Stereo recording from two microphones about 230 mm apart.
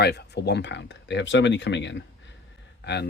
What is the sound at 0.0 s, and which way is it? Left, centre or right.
Speech, left.